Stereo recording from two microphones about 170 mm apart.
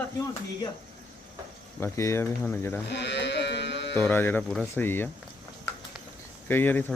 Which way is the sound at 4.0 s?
10° left (ahead or behind).